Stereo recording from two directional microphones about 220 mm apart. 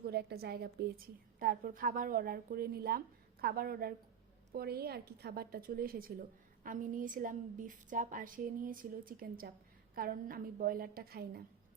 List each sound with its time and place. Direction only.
0.0 s a woman's voice: 45° right (ahead or behind)